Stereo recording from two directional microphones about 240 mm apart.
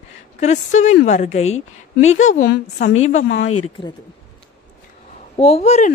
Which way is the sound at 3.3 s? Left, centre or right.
Left.